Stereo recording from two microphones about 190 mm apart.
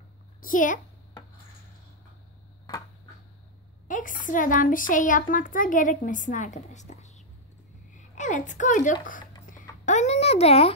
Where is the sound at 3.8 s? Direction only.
45° left (ahead or behind).